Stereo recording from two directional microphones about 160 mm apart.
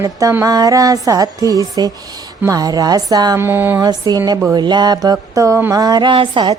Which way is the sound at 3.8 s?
25° right (ahead or behind).